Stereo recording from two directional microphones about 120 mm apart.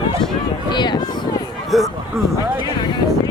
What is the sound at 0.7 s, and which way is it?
Speech, 40° left (ahead or behind).